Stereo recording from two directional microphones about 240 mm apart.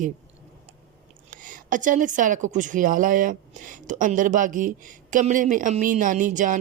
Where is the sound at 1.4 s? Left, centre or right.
Right.